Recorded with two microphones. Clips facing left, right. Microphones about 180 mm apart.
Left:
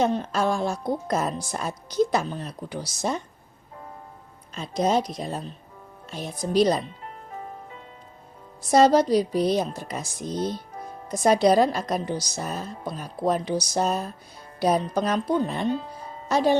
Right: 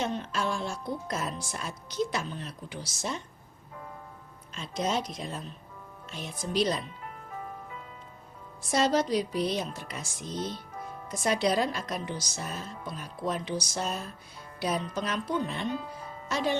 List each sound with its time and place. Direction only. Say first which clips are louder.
0.0 s speech: left 8 dB; 40° left (ahead or behind)
4.5 s speech: left 7 dB; 40° left (ahead or behind)
6.1 s music: left 7 dB; 40° left (ahead or behind)
8.7 s speech: left 8 dB; 40° left (ahead or behind)